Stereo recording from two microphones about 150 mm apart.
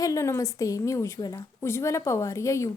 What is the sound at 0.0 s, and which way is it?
A woman's voice, 20° left (ahead or behind).